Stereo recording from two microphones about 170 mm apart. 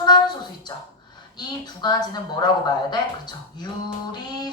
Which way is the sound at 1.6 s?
25° left (ahead or behind).